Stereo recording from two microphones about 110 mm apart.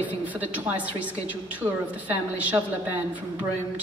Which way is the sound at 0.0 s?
15° right (ahead or behind).